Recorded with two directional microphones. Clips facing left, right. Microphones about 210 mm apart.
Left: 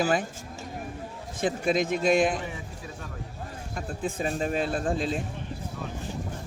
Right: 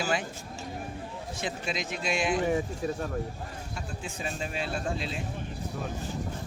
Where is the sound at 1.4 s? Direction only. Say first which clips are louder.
Left 9 dB; 50° left (ahead or behind).